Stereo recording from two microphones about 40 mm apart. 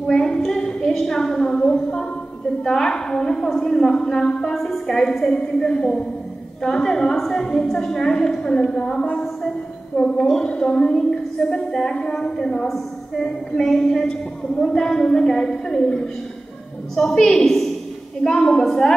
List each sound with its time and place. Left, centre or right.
0.0 s a woman's voice: centre